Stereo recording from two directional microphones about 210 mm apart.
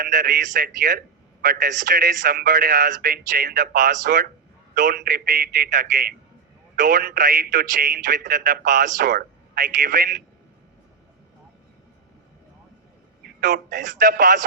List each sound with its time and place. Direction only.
0.0 s a man's voice: 40° right (ahead or behind)
13.2 s speech: 40° right (ahead or behind)